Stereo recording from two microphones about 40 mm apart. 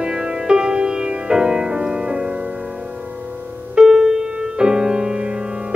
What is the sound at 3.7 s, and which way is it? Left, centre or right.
Music, centre.